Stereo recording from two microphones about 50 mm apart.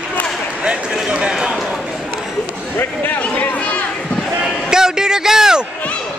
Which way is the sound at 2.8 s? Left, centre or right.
Left.